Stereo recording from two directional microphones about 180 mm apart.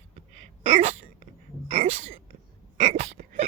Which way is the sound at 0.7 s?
40° right (ahead or behind).